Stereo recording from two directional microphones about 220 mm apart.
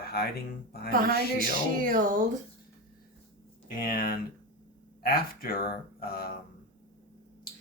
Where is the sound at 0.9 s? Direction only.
40° right (ahead or behind).